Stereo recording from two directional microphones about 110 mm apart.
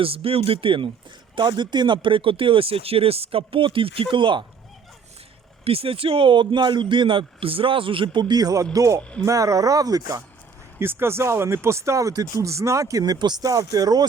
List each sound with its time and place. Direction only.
0.0 s speech: 60° right (ahead or behind)
5.6 s speech: 60° right (ahead or behind); by 10.2 s 35° right (ahead or behind)
10.8 s speech: 20° right (ahead or behind)